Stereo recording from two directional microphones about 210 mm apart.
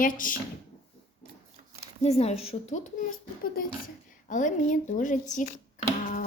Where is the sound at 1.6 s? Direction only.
35° right (ahead or behind).